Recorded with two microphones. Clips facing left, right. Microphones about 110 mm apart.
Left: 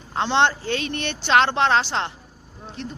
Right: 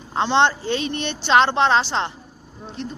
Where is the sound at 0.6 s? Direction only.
20° right (ahead or behind).